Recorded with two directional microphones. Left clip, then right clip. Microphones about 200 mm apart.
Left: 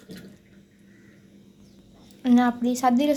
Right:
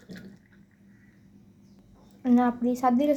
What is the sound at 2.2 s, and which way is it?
Speech, 5° right (ahead or behind).